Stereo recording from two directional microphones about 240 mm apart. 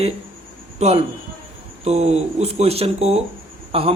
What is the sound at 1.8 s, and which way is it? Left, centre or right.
Speech, right.